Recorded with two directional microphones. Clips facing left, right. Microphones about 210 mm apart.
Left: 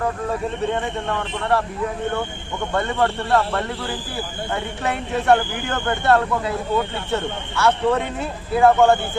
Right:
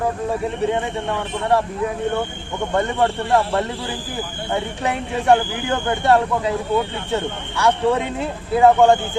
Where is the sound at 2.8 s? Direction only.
20° right (ahead or behind).